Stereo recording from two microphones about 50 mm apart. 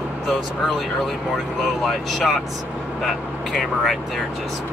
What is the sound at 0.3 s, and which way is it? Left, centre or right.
Speech, centre.